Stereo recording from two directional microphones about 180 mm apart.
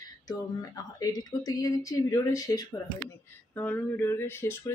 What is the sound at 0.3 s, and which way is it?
Speech, 20° left (ahead or behind).